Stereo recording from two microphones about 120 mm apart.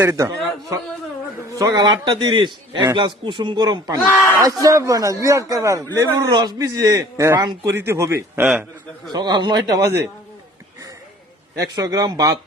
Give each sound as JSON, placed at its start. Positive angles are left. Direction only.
{"t": 0.0, "sound": "a man's voice", "side_deg": -25}
{"t": 7.8, "sound": "a man's voice", "side_deg": -25}
{"t": 9.1, "sound": "a man's voice", "side_deg": -35}
{"t": 11.7, "sound": "a man's voice", "side_deg": -30}